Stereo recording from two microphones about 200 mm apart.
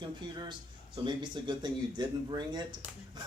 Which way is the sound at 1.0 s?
25° right (ahead or behind).